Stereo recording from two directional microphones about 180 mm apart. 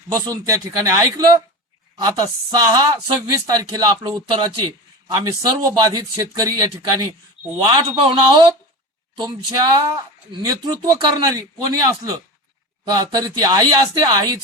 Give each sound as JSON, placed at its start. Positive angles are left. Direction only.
{"t": 0.1, "sound": "a man's voice", "side_deg": -15}
{"t": 10.4, "sound": "speech", "side_deg": -20}